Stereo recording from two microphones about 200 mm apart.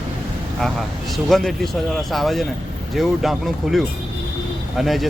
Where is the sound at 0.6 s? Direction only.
Centre (ahead or behind).